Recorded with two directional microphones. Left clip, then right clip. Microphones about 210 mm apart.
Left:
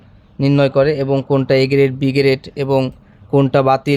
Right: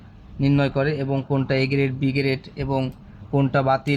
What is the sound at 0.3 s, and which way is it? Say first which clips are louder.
Speech: left 8 dB; 50° left (ahead or behind).